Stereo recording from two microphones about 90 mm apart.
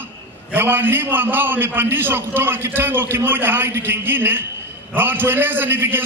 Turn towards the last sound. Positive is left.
turn(degrees=-25)  # may be behind; listen again after turning